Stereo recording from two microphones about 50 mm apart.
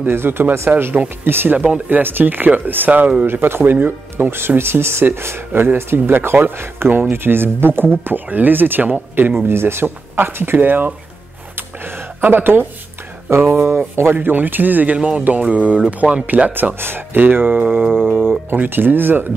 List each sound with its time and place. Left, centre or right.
0.0 s speech: right
11.5 s a sound: right
13.6 s speech: right
15.0 s speech: right
16.5 s speech: right